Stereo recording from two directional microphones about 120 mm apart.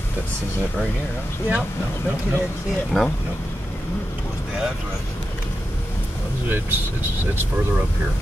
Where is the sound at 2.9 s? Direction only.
5° left (ahead or behind).